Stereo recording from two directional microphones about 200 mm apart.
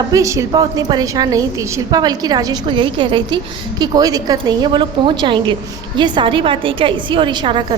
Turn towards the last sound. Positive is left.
turn(degrees=-25)  # may be behind; listen again after turning